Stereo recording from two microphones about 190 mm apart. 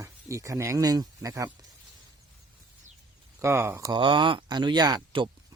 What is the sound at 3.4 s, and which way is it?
Speech, 15° right (ahead or behind).